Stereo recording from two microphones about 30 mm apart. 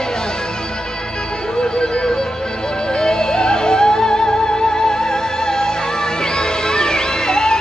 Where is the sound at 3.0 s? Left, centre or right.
Left.